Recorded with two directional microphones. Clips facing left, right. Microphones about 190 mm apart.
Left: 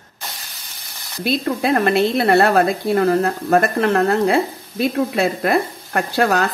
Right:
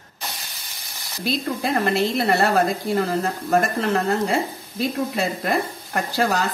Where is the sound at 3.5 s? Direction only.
60° left (ahead or behind).